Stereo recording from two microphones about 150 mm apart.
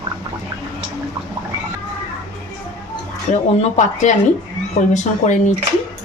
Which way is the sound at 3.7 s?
55° left (ahead or behind).